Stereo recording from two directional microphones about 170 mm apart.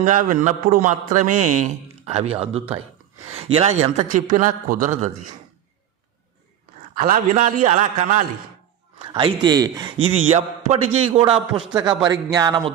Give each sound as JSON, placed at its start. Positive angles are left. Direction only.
{"t": 0.0, "sound": "a man's voice", "side_deg": -45}
{"t": 6.9, "sound": "a man's voice", "side_deg": -55}
{"t": 9.0, "sound": "a man's voice", "side_deg": -30}